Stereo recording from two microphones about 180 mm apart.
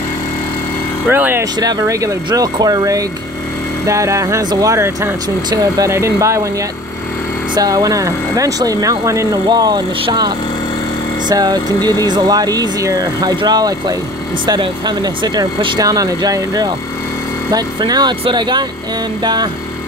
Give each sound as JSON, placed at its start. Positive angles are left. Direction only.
{"t": 1.1, "sound": "speech", "side_deg": -10}
{"t": 7.5, "sound": "speech", "side_deg": -20}